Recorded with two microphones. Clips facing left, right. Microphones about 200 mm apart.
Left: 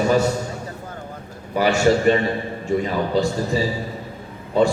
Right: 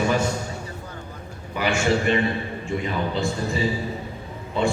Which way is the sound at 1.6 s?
40° left (ahead or behind).